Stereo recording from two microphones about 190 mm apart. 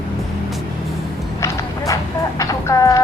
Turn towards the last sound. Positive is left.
turn(degrees=15)  # may be behind; listen again after turning